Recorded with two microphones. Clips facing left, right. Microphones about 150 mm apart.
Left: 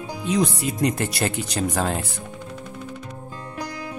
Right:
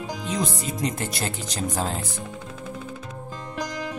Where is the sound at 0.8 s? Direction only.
65° left (ahead or behind).